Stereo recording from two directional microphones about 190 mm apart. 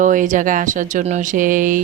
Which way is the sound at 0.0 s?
45° right (ahead or behind).